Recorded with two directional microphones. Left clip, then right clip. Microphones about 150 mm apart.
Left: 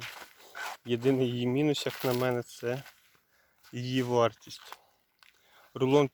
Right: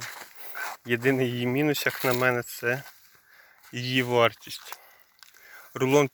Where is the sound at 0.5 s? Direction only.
45° right (ahead or behind).